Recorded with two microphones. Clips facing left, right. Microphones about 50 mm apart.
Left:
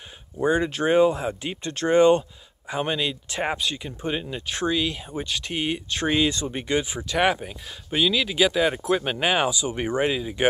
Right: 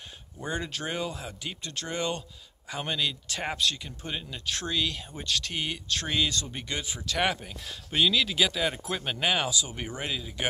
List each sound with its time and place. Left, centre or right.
0.4 s speech: left